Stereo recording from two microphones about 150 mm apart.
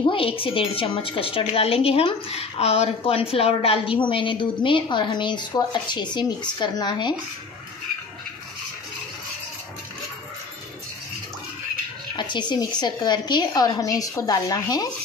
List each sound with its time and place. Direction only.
0.0 s a woman's voice: 35° left (ahead or behind)
12.2 s a woman's voice: 30° left (ahead or behind)